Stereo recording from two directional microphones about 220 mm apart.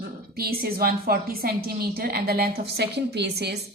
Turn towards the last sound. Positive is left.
turn(degrees=-50)  # may be behind; listen again after turning